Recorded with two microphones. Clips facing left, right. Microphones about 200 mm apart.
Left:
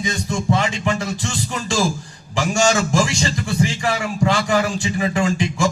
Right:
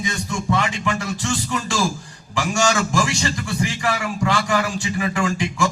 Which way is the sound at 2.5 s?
25° left (ahead or behind).